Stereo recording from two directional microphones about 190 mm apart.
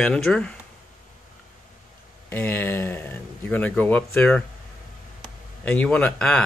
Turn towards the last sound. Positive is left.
turn(degrees=5)  # may be behind; listen again after turning